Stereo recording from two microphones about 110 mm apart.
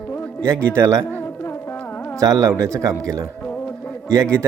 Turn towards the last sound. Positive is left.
turn(degrees=-25)  # may be behind; listen again after turning